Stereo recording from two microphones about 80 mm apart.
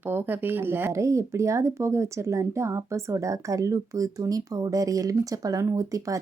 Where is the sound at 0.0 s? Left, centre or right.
Right.